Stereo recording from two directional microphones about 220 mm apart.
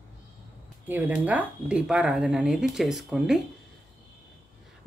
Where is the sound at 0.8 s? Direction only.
5° right (ahead or behind).